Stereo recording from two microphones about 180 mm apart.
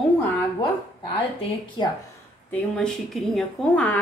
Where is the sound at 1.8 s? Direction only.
25° left (ahead or behind).